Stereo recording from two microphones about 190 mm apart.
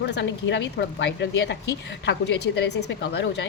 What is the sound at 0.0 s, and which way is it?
A woman's voice, 65° left (ahead or behind).